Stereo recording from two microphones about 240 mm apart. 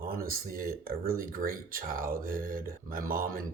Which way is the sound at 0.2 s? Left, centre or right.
Right.